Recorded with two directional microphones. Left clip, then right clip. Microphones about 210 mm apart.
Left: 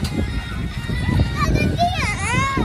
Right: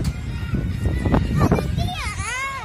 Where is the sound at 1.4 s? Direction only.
50° right (ahead or behind).